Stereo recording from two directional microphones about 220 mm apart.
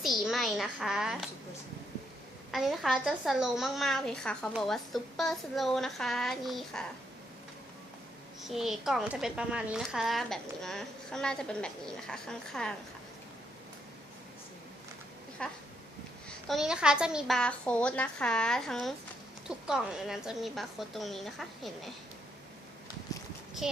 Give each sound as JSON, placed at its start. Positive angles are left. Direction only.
{"t": 0.0, "sound": "a child's voice", "side_deg": 0}
{"t": 2.5, "sound": "a woman's voice", "side_deg": 0}
{"t": 8.4, "sound": "a woman's voice", "side_deg": 0}
{"t": 15.4, "sound": "a woman's voice", "side_deg": 5}
{"t": 23.1, "sound": "a sound", "side_deg": 15}